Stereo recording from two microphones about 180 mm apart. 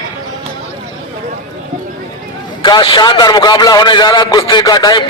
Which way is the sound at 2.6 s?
25° left (ahead or behind).